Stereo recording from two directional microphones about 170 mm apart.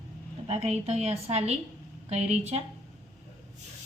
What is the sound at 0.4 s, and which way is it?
Speech, 35° right (ahead or behind).